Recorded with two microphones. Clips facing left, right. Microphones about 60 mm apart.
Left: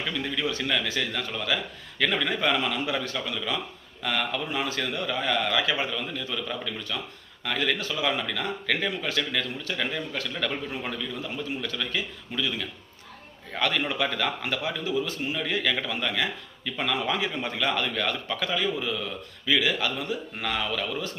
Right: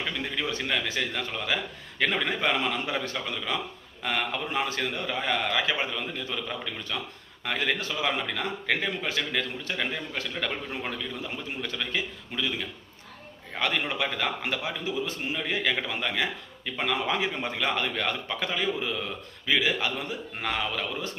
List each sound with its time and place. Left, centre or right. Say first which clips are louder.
0.1 s a man's voice: left 2 dB; right
11.6 s a man's voice: left 1 dB; right
13.6 s a man's voice: left 2 dB; right